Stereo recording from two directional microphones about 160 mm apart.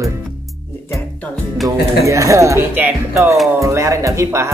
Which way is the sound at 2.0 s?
20° right (ahead or behind).